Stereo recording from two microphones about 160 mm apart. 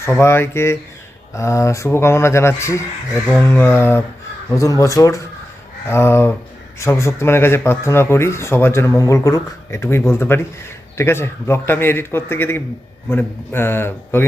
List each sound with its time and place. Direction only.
0.0 s speech: 15° left (ahead or behind)